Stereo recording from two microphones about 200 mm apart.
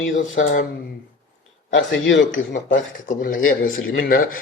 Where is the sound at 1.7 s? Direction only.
65° left (ahead or behind).